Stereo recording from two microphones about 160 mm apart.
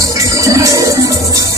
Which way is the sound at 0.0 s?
20° right (ahead or behind).